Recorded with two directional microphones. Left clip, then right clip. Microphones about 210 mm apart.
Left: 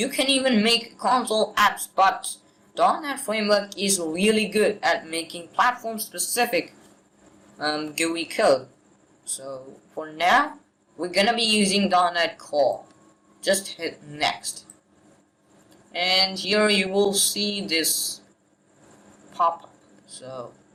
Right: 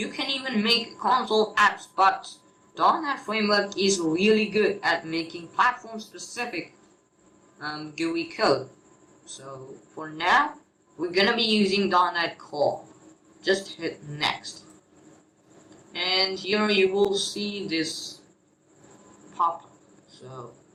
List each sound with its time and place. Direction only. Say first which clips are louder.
0.0 s speech: left 7 dB; 45° left (ahead or behind)
7.6 s speech: left 6 dB; 45° left (ahead or behind)
10.0 s speech: left 2 dB; 45° left (ahead or behind)
15.9 s speech: left 3 dB; 45° left (ahead or behind)